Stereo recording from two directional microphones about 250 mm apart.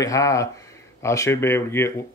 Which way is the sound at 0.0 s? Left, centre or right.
Centre.